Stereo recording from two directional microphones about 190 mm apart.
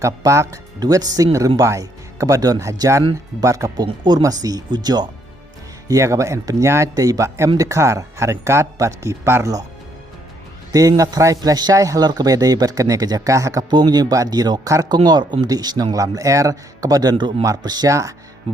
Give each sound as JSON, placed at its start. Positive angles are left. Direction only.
{"t": 0.0, "sound": "a man's voice", "side_deg": -15}
{"t": 10.7, "sound": "a man's voice", "side_deg": -20}